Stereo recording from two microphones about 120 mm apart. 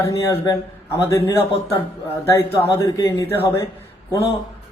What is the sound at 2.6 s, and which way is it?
A man's voice, 30° left (ahead or behind).